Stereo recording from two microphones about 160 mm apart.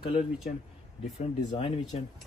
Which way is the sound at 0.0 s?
40° left (ahead or behind).